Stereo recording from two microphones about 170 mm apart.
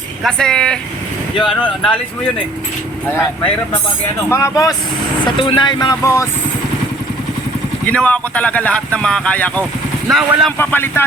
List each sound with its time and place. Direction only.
0.2 s speech: 5° left (ahead or behind)
3.1 s speech: 10° left (ahead or behind)
5.2 s speech: 30° left (ahead or behind)
7.9 s speech: 5° left (ahead or behind)
10.6 s speech: 10° left (ahead or behind)